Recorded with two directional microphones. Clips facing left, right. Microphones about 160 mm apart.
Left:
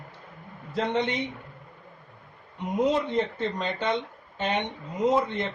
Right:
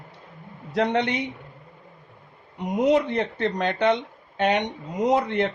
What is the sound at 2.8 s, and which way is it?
Speech, 70° right (ahead or behind).